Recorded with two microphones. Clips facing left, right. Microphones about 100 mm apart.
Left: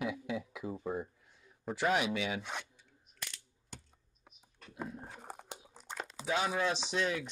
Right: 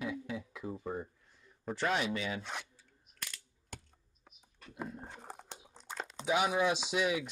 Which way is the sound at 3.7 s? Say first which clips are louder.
Right 2 dB; 55° right (ahead or behind).